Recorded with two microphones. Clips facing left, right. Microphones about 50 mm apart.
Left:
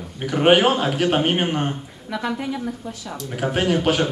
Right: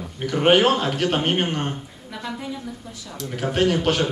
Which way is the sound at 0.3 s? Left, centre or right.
Centre.